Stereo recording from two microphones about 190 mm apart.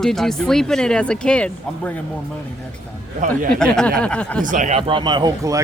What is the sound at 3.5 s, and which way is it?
Speech, 5° left (ahead or behind).